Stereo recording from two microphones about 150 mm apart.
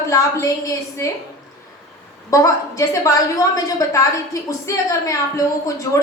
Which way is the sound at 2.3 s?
20° left (ahead or behind).